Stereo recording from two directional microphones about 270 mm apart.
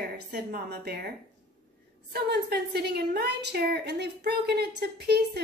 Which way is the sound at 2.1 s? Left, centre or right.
Right.